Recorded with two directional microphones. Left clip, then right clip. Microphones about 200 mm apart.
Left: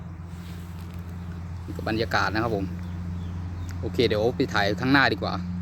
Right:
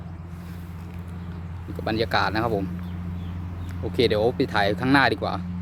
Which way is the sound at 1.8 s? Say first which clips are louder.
Right 2 dB; centre (ahead or behind).